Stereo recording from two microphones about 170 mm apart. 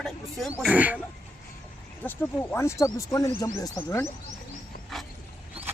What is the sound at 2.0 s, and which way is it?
Speech, 15° left (ahead or behind).